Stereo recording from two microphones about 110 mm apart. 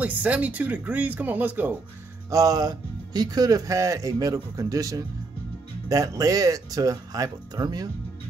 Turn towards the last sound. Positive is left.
turn(degrees=-40)  # may be behind; listen again after turning